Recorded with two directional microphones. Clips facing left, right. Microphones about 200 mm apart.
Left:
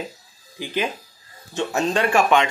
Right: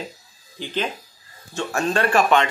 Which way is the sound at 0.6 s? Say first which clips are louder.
Left 1 dB; 10° left (ahead or behind).